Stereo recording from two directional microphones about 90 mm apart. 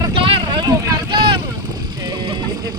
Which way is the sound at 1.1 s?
65° right (ahead or behind).